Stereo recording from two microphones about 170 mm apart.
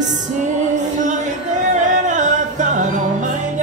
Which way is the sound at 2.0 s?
45° right (ahead or behind).